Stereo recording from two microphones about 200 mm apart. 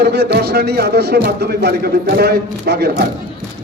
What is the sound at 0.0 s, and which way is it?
A man's voice, 55° right (ahead or behind).